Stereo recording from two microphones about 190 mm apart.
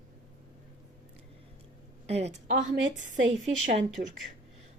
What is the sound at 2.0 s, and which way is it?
Speech, 35° right (ahead or behind).